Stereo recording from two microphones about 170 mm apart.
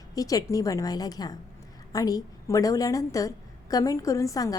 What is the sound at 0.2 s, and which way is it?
A woman's voice, 20° left (ahead or behind).